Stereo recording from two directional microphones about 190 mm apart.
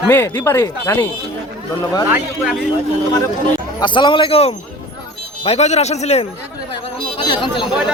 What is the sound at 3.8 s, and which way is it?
A man's voice, 25° left (ahead or behind).